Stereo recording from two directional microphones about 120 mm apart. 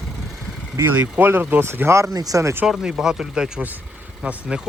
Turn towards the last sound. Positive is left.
turn(degrees=-10)  # may be behind; listen again after turning